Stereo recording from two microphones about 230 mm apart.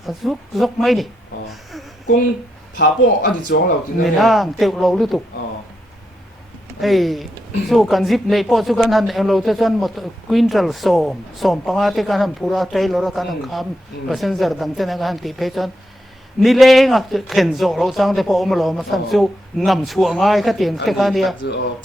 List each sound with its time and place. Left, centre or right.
0.0 s speech: centre
2.7 s speech: left
4.0 s speech: centre
6.8 s speech: centre